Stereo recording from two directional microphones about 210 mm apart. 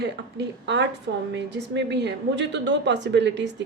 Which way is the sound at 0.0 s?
55° right (ahead or behind).